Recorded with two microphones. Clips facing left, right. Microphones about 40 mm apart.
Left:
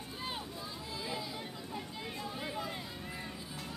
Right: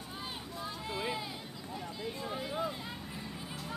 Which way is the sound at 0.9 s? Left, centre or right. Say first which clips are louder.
Right 4 dB; right.